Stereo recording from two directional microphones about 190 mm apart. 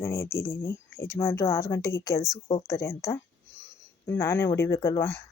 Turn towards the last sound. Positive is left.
turn(degrees=15)  # may be behind; listen again after turning